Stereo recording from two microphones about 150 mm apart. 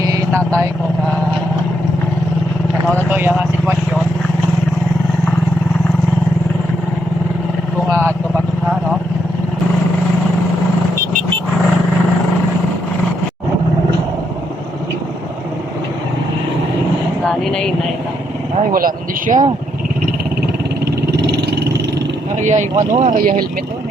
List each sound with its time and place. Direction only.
0.1 s vehicle: 20° right (ahead or behind)
3.1 s speech: 10° right (ahead or behind)
7.9 s vehicle: 15° right (ahead or behind)
17.2 s a sound: 5° left (ahead or behind)
18.7 s a sound: 70° right (ahead or behind)
20.8 s vehicle: 90° right
22.4 s vehicle: 55° right (ahead or behind)
23.0 s speech: 55° right (ahead or behind)